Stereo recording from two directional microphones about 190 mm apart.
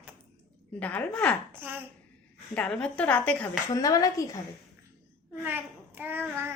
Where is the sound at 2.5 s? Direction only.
5° left (ahead or behind).